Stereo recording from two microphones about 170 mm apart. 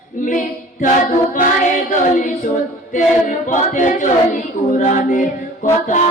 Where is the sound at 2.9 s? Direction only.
50° left (ahead or behind).